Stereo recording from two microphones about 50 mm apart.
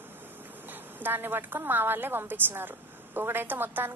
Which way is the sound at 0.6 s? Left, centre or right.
Right.